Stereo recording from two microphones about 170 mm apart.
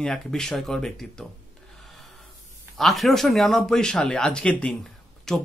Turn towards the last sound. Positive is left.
turn(degrees=5)  # may be behind; listen again after turning